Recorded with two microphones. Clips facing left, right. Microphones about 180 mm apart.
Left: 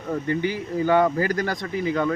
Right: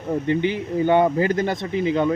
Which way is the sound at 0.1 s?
20° right (ahead or behind).